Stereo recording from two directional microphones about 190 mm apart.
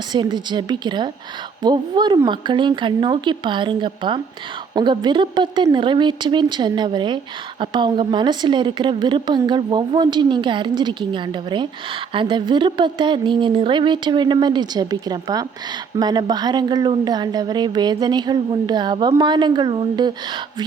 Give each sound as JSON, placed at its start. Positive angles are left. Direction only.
{"t": 0.1, "sound": "a woman's voice", "side_deg": -25}